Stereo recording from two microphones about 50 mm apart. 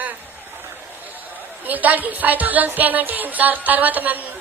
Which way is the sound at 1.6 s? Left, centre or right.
Right.